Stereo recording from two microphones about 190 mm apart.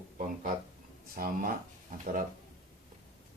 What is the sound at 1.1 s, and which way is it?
Speech, 50° right (ahead or behind).